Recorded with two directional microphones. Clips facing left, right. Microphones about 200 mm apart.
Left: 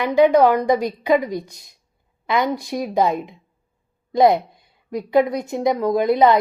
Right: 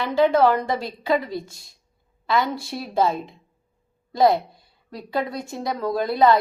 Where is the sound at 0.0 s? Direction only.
15° left (ahead or behind).